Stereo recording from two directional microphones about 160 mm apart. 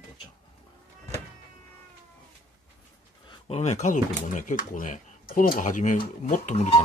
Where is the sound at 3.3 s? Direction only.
40° left (ahead or behind).